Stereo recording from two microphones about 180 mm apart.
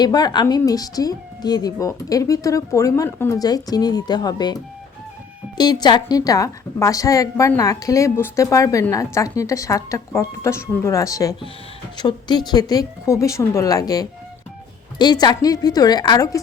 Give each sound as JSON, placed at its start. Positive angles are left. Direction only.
{"t": 0.0, "sound": "speech", "side_deg": 25}
{"t": 5.5, "sound": "a woman's voice", "side_deg": 25}